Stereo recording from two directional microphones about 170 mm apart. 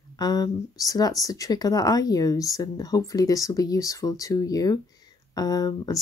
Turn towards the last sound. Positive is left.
turn(degrees=20)  # may be behind; listen again after turning